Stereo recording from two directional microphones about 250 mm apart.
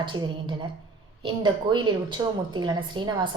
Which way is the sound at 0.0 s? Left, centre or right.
Centre.